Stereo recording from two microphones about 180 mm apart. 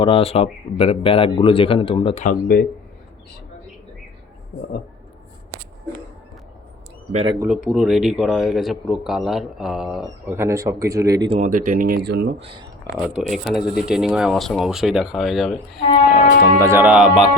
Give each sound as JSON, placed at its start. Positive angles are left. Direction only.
{"t": 0.0, "sound": "speech", "side_deg": 30}
{"t": 2.2, "sound": "speech", "side_deg": 55}
{"t": 7.4, "sound": "speech", "side_deg": -5}
{"t": 10.3, "sound": "speech", "side_deg": -15}
{"t": 11.3, "sound": "speech", "side_deg": -50}
{"t": 12.0, "sound": "speech", "side_deg": -65}
{"t": 12.9, "sound": "speech", "side_deg": 0}
{"t": 16.4, "sound": "speech", "side_deg": -15}